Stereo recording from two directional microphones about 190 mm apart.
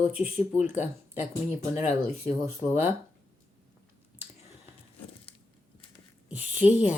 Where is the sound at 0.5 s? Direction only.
40° left (ahead or behind).